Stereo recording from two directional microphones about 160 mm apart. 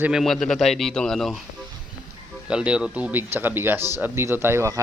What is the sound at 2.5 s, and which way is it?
Speech, 5° right (ahead or behind).